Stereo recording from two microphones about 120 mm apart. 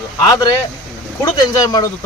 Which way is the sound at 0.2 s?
25° left (ahead or behind).